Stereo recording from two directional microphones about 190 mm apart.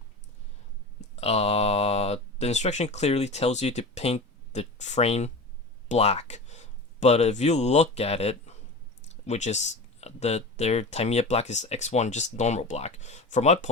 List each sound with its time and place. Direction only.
1.1 s speech: 35° left (ahead or behind)